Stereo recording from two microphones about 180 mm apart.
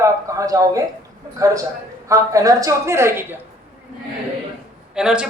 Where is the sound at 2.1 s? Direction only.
20° right (ahead or behind).